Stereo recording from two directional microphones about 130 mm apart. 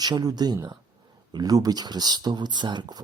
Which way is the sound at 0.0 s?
30° right (ahead or behind).